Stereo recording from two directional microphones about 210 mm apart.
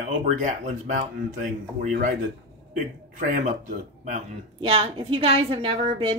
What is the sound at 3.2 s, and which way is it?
A woman's voice, 40° right (ahead or behind).